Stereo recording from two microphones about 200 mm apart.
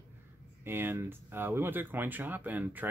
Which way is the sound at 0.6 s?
10° right (ahead or behind).